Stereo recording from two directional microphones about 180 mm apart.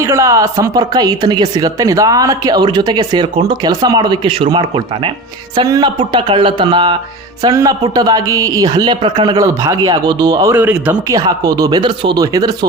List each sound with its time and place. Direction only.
0.0 s speech: 15° right (ahead or behind)
11.3 s speech: 20° right (ahead or behind)